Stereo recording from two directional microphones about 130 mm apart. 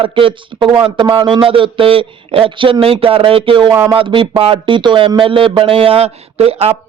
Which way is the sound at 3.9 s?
40° right (ahead or behind).